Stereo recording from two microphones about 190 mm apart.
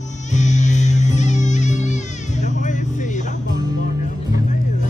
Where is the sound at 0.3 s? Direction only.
40° left (ahead or behind).